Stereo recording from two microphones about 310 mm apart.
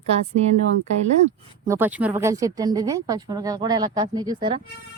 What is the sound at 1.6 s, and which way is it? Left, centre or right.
Speech, centre.